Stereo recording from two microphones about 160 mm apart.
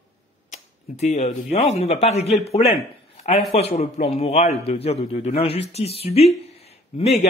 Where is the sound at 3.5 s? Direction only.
40° left (ahead or behind).